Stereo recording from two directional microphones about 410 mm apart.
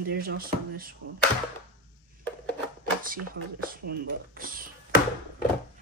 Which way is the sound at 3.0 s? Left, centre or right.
Right.